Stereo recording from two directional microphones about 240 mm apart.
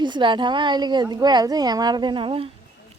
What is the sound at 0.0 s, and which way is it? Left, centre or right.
Speech, centre.